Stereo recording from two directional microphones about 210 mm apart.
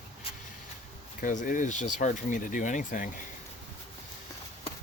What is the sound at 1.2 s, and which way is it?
Speech, 40° left (ahead or behind).